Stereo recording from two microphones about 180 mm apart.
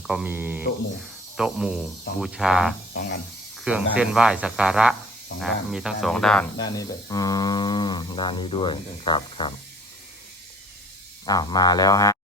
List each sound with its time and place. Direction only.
0.1 s speech: 10° right (ahead or behind)
2.9 s speech: 70° left (ahead or behind)
3.6 s speech: 5° right (ahead or behind)
6.6 s speech: 20° left (ahead or behind)
11.3 s speech: 20° left (ahead or behind)